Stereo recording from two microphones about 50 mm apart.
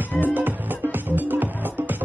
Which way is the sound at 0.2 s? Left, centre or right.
Right.